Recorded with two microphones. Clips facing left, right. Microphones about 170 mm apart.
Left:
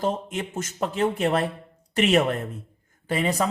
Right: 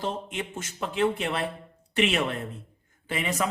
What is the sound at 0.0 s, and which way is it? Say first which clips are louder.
A man's voice: left 5 dB; 45° left (ahead or behind).